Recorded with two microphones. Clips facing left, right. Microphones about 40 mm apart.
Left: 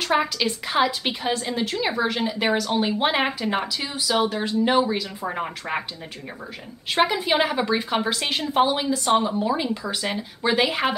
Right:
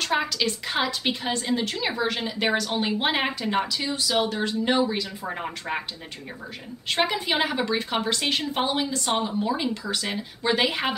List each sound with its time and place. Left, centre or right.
0.0 s a woman's voice: centre
6.9 s a woman's voice: centre